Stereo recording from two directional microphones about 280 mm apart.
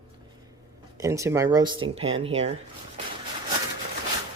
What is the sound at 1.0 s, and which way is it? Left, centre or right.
Speech, centre.